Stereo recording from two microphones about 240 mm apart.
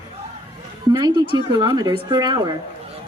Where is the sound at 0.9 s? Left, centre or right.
Centre.